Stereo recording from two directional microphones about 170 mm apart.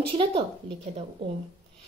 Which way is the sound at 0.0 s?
30° right (ahead or behind).